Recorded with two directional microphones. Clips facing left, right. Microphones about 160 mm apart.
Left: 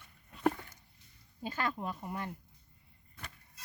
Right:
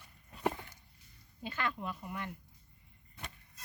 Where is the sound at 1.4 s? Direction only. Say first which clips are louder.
Left 2 dB; 35° left (ahead or behind).